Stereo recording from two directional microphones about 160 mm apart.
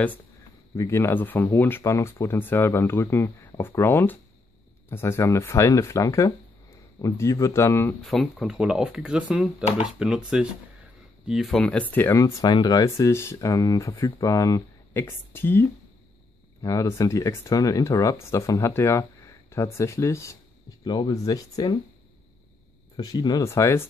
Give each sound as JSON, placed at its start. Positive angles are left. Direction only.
{"t": 0.7, "sound": "speech", "side_deg": 15}
{"t": 8.1, "sound": "speech", "side_deg": 0}
{"t": 22.9, "sound": "speech", "side_deg": 25}